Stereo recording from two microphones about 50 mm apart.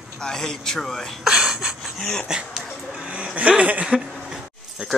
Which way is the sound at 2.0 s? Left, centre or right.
Centre.